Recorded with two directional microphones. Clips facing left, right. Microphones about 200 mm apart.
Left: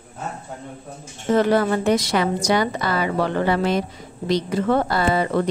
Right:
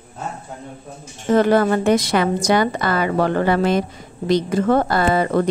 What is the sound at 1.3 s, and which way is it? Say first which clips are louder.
A woman's voice: right 3 dB; 50° right (ahead or behind).